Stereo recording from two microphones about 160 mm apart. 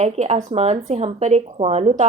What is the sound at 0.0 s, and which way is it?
A woman's voice, 45° right (ahead or behind).